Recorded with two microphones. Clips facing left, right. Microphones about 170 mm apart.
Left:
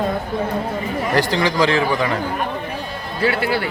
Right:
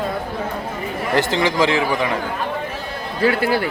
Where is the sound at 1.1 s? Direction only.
20° right (ahead or behind).